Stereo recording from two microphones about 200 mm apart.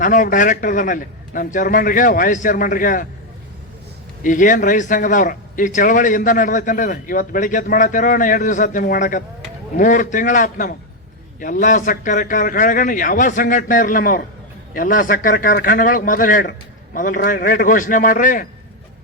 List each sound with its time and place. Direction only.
0.0 s a man's voice: 40° left (ahead or behind)
4.2 s a man's voice: 40° left (ahead or behind)